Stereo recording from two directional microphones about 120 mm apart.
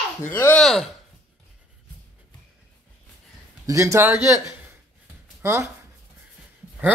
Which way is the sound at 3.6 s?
25° right (ahead or behind).